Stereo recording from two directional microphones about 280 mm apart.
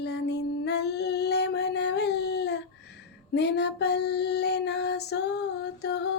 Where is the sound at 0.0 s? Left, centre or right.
Left.